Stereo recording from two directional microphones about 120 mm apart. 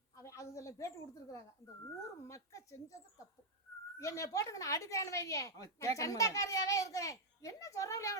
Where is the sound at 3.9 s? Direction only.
25° left (ahead or behind).